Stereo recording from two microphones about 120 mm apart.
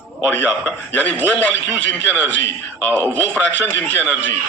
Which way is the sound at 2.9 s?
15° left (ahead or behind).